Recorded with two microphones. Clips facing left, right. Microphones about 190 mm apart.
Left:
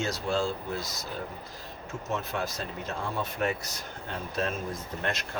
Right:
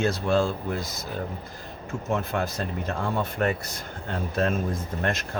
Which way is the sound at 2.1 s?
55° right (ahead or behind).